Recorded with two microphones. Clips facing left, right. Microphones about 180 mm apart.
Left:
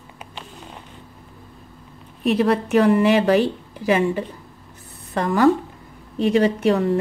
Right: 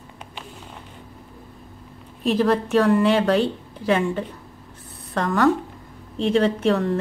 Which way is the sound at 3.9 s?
5° left (ahead or behind).